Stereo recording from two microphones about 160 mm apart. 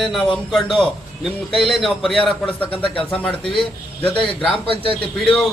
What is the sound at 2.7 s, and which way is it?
Speech, 35° left (ahead or behind).